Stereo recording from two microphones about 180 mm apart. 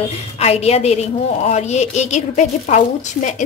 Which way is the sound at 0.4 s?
35° left (ahead or behind).